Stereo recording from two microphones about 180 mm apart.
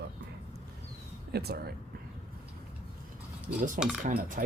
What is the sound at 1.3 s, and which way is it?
Speech, 65° right (ahead or behind).